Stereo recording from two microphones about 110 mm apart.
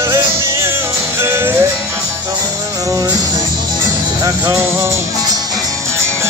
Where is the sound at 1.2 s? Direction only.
25° right (ahead or behind).